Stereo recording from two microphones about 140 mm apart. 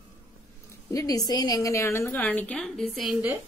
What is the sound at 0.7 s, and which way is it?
A woman's voice, 25° left (ahead or behind).